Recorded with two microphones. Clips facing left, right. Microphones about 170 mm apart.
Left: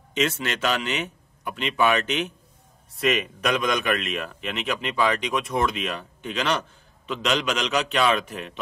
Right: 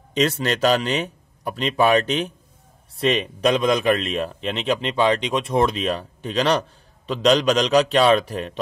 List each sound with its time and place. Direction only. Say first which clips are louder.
0.1 s speech: right 5 dB; 35° right (ahead or behind)